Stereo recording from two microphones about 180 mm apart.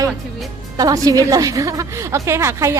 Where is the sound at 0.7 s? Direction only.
20° right (ahead or behind).